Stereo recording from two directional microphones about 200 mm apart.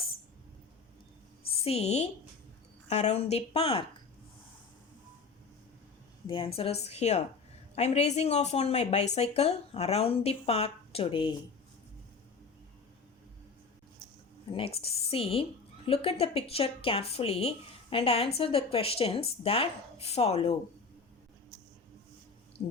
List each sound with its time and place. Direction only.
1.6 s speech: 30° left (ahead or behind)
6.2 s speech: 25° left (ahead or behind)
14.5 s a woman's voice: 30° left (ahead or behind)